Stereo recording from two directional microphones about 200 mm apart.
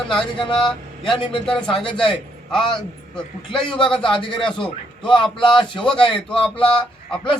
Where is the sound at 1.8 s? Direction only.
25° left (ahead or behind).